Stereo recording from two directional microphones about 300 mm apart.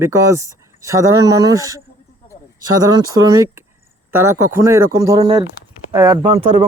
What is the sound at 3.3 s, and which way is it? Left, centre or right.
A man's voice, centre.